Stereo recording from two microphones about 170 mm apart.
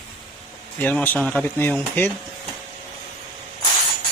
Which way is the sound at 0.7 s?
10° left (ahead or behind).